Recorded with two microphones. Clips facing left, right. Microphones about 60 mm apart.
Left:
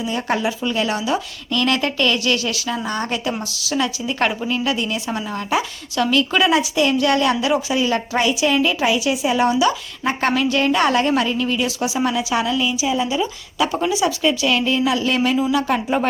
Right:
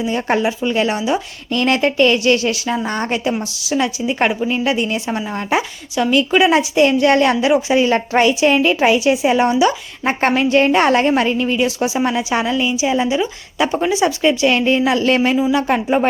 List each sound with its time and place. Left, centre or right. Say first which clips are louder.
0.0 s a woman's voice: right 4 dB; right
6.5 s a woman's voice: right 4 dB; right
13.1 s a woman's voice: right 3 dB; right